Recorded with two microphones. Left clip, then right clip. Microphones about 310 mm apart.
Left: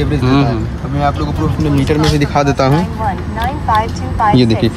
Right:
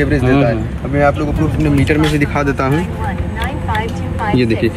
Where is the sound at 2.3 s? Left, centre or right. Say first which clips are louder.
Left 3 dB; left.